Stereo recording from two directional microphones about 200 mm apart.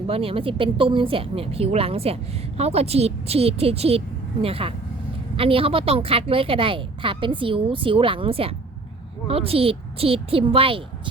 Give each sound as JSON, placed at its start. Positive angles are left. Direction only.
{"t": 0.1, "sound": "a woman's voice", "side_deg": -30}